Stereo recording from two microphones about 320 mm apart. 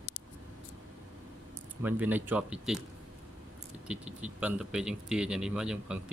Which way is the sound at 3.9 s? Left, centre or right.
Centre.